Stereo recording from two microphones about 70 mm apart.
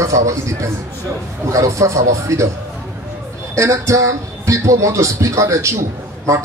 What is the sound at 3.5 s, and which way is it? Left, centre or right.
A man's voice, right.